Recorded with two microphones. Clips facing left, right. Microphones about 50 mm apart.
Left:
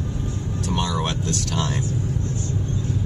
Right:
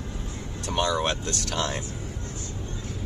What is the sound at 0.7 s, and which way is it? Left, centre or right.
Speech, centre.